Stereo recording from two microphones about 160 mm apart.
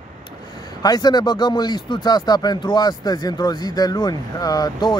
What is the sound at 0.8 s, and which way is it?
Speech, 25° left (ahead or behind).